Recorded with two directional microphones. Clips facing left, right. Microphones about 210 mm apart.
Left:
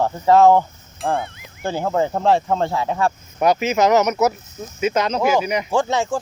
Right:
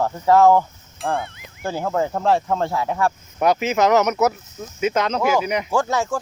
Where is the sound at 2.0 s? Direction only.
25° left (ahead or behind).